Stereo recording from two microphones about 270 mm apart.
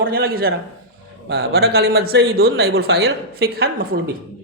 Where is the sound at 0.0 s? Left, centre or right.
Right.